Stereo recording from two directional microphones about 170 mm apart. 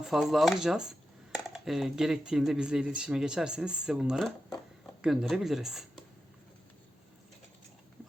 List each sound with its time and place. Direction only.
0.0 s speech: centre (ahead or behind)